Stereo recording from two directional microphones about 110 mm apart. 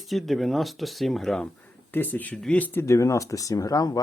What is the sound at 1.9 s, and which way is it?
Speech, 15° left (ahead or behind).